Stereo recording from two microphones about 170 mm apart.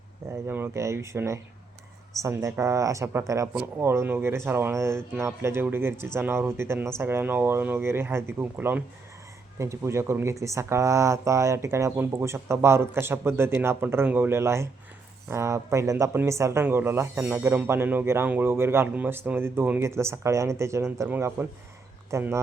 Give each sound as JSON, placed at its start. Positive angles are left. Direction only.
{"t": 0.4, "sound": "speech", "side_deg": -10}